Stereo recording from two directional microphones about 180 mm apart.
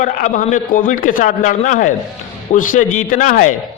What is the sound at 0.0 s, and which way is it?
A man's voice, 45° left (ahead or behind).